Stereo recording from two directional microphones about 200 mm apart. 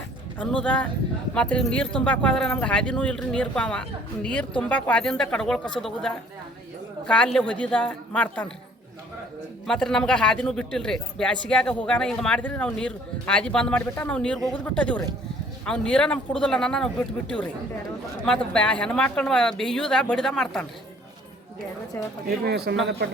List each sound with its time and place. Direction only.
0.3 s speech: 5° left (ahead or behind)
9.6 s speech: 5° left (ahead or behind)
22.3 s speech: 50° right (ahead or behind)